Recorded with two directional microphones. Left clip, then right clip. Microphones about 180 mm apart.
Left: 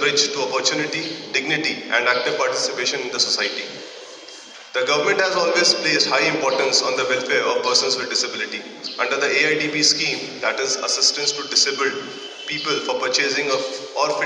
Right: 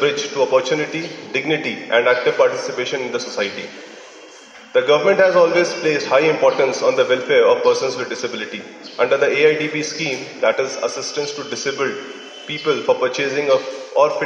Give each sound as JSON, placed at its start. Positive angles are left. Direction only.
{"t": 0.6, "sound": "a man's voice", "side_deg": -45}
{"t": 4.7, "sound": "a man's voice", "side_deg": -45}